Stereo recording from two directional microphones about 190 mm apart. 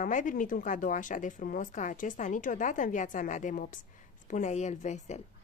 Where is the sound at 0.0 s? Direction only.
45° left (ahead or behind).